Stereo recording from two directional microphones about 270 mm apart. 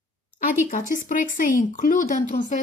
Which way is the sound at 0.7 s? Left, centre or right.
Left.